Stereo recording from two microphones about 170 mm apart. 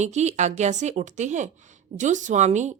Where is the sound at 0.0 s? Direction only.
40° right (ahead or behind).